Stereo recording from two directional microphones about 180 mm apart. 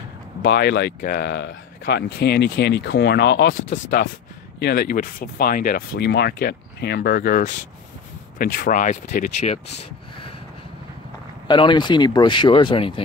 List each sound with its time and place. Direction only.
0.4 s speech: 70° left (ahead or behind)
3.8 s speech: 55° left (ahead or behind); by 9.6 s 40° left (ahead or behind)
11.4 s speech: 25° left (ahead or behind)